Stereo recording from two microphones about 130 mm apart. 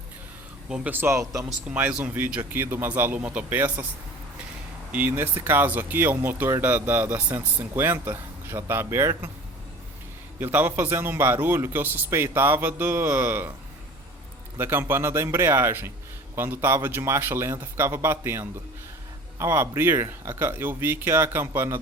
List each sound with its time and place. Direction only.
0.7 s speech: 15° right (ahead or behind)
4.9 s speech: 10° right (ahead or behind)
10.4 s speech: 15° right (ahead or behind)
14.6 s a man's voice: 15° right (ahead or behind)